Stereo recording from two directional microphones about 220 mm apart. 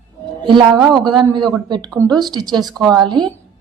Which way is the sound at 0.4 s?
20° right (ahead or behind).